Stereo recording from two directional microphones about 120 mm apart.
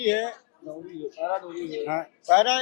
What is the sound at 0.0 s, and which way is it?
A man's voice, 20° left (ahead or behind).